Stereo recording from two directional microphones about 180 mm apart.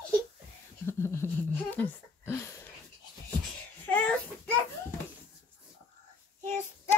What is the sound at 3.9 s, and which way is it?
Child singing, 10° left (ahead or behind).